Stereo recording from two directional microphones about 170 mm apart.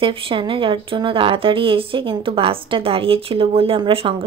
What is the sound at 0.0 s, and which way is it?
Speech, 30° right (ahead or behind).